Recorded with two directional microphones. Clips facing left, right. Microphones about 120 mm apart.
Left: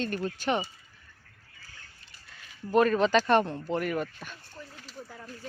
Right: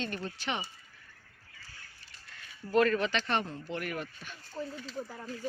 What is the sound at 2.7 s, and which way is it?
Speech, 20° left (ahead or behind).